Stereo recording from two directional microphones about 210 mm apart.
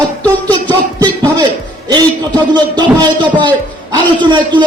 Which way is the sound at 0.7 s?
20° right (ahead or behind).